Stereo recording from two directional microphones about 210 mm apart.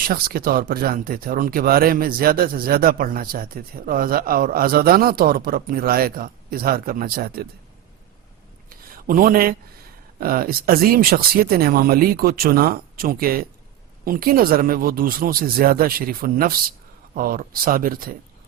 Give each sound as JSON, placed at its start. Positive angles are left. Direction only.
{"t": 0.0, "sound": "speech", "side_deg": -45}
{"t": 8.7, "sound": "a sound", "side_deg": -40}
{"t": 10.2, "sound": "speech", "side_deg": -45}